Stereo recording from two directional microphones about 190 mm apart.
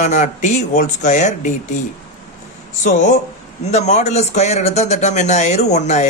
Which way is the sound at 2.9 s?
40° left (ahead or behind).